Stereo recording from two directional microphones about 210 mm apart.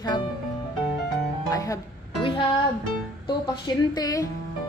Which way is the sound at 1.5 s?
15° left (ahead or behind).